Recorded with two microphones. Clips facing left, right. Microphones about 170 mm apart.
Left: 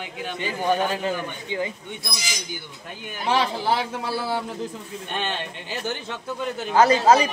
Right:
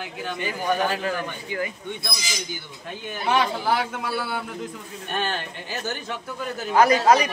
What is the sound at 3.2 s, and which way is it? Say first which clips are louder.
A man's voice: even; 30° left (ahead or behind).